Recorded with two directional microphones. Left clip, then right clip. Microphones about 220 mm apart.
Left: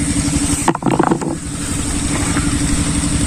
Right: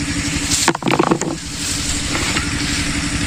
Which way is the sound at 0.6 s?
20° right (ahead or behind).